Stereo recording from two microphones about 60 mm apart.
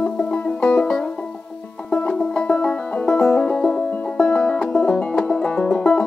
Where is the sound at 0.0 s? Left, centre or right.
Left.